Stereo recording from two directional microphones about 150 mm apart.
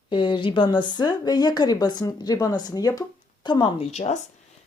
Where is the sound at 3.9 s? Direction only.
45° left (ahead or behind).